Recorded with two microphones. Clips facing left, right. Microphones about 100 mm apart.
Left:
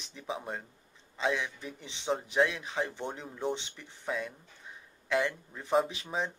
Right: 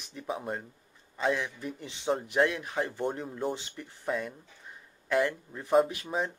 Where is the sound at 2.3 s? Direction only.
10° right (ahead or behind).